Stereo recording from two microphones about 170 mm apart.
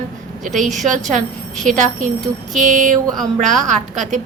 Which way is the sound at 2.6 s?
50° right (ahead or behind).